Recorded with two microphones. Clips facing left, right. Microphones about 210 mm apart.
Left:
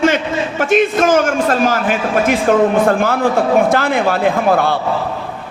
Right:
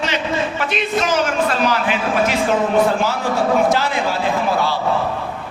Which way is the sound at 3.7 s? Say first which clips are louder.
Left 4 dB; 55° left (ahead or behind).